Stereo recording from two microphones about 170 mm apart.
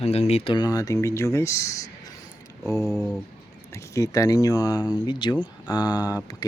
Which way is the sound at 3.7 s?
15° left (ahead or behind).